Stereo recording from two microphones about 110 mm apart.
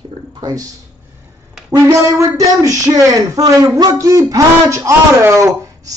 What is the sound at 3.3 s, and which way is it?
Speech, 35° right (ahead or behind).